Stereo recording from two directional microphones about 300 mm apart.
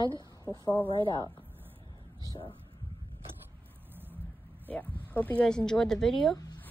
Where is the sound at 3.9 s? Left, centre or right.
Centre.